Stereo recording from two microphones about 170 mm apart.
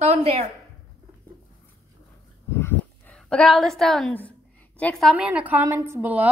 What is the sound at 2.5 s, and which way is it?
Dog, 10° left (ahead or behind).